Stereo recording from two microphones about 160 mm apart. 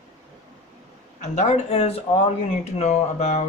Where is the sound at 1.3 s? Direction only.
45° left (ahead or behind).